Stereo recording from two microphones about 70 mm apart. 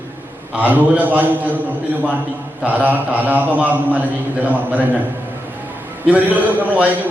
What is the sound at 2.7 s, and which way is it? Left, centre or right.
A man's voice, right.